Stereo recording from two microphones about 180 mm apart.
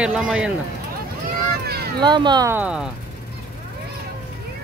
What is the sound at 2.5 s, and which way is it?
Speech, 10° right (ahead or behind).